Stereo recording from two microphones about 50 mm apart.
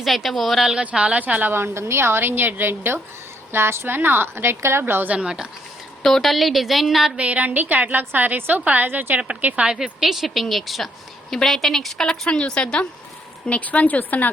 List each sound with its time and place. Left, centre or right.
0.0 s speech: centre
0.6 s a woman's voice: centre
0.9 s a woman's voice: right
1.5 s a woman's voice: right
5.0 s a woman's voice: right
6.0 s speech: centre
7.2 s a woman's voice: right
9.6 s a woman's voice: centre
10.0 s a woman's voice: centre
13.5 s a woman's voice: left